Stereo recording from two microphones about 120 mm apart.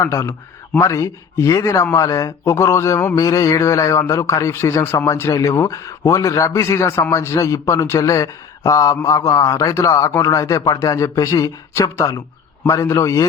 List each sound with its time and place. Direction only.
0.0 s speech: 25° left (ahead or behind)